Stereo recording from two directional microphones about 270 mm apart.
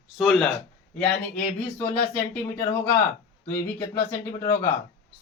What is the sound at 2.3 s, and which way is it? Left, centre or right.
Speech, centre.